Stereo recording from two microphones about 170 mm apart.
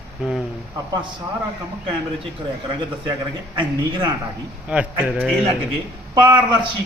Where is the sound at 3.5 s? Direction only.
30° right (ahead or behind).